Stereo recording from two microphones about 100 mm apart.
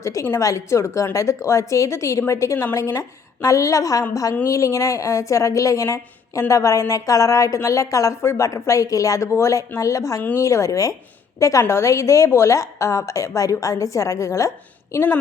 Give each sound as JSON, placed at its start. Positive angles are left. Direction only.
{"t": 0.0, "sound": "a woman's voice", "side_deg": 30}
{"t": 14.9, "sound": "a woman's voice", "side_deg": 20}